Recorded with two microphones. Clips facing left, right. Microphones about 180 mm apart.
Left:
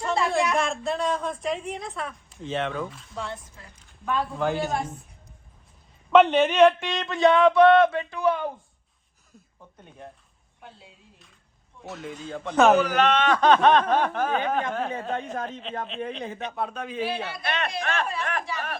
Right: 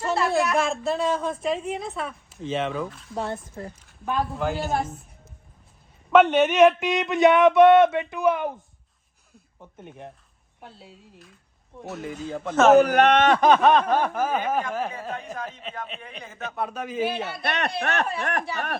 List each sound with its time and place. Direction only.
0.0 s a woman's voice: 5° right (ahead or behind)
3.2 s speech: 50° right (ahead or behind)
4.4 s a woman's voice: 5° right (ahead or behind)
6.1 s a woman's voice: 5° right (ahead or behind)
6.9 s speech: 20° right (ahead or behind)
11.9 s a woman's voice: 5° right (ahead or behind)
12.8 s speech: 60° right (ahead or behind)
13.4 s a woman's voice: 10° right (ahead or behind)
17.4 s speech: 65° right (ahead or behind)